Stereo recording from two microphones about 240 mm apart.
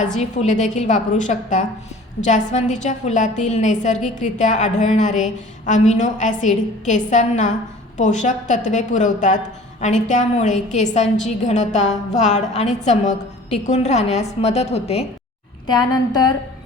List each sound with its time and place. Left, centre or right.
0.0 s a woman's voice: left